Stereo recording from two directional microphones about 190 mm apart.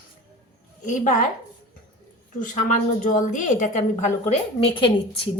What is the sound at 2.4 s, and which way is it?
A woman's voice, 40° left (ahead or behind).